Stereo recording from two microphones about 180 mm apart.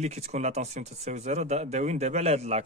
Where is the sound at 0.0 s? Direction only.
40° right (ahead or behind).